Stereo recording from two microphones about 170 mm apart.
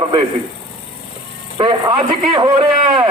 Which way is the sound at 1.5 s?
30° right (ahead or behind).